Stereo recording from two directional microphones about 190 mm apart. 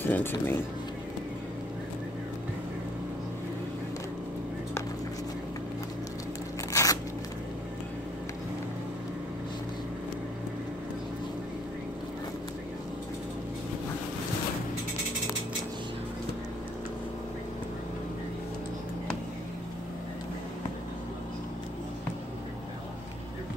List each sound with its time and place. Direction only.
0.0 s speech: 10° left (ahead or behind)
6.7 s crunch: 15° left (ahead or behind)